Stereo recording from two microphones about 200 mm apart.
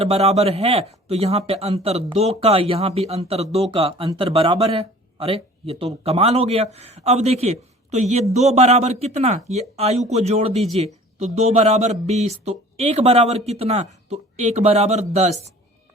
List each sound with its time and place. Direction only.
0.0 s speech: 30° right (ahead or behind)